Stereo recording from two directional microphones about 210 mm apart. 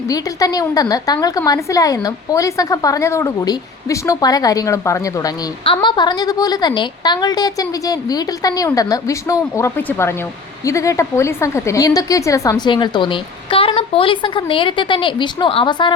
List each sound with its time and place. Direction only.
0.1 s a woman's voice: 15° left (ahead or behind)